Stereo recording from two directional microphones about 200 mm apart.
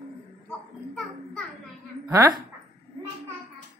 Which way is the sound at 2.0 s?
20° right (ahead or behind).